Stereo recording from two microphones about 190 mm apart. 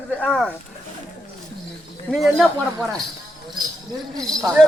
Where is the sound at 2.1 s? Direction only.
Centre (ahead or behind).